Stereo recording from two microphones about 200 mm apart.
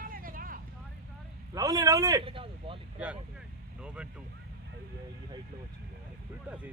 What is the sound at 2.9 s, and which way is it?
Speech, 5° right (ahead or behind).